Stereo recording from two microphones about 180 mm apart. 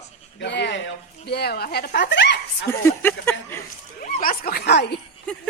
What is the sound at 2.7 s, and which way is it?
Speech, 10° left (ahead or behind).